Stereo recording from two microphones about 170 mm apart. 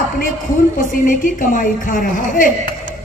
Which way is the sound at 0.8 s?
50° left (ahead or behind).